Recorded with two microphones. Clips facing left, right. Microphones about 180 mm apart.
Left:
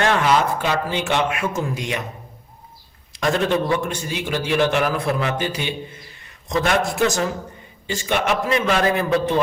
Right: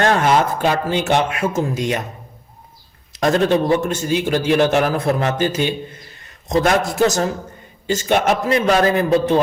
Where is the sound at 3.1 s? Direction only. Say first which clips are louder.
Right 4 dB; 40° right (ahead or behind).